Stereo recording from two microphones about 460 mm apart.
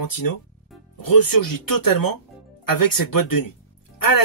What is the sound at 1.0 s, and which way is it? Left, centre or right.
Speech, left.